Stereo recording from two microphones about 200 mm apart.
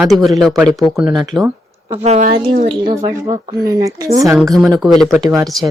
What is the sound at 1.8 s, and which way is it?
Speech, 30° right (ahead or behind).